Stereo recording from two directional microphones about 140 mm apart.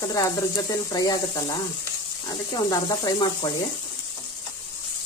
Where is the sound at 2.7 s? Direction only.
25° left (ahead or behind).